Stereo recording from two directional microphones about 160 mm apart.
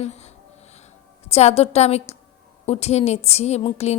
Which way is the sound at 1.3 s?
40° left (ahead or behind).